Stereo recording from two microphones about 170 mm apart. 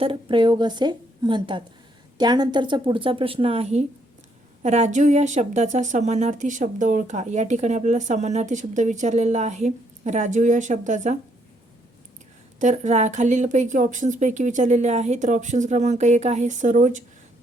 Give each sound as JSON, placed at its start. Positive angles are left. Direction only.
{"t": 0.0, "sound": "a woman's voice", "side_deg": -30}
{"t": 12.5, "sound": "speech", "side_deg": -45}